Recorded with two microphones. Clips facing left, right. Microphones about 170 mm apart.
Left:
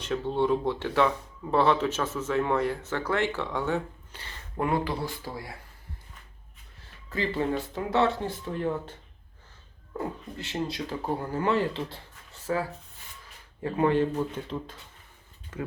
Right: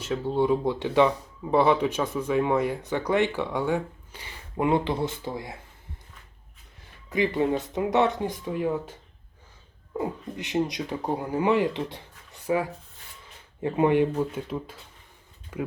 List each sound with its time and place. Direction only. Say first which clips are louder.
0.0 s speech: right 2 dB; 10° right (ahead or behind)
7.1 s speech: right 4 dB; 15° right (ahead or behind)
10.0 s speech: right 3 dB; 15° right (ahead or behind)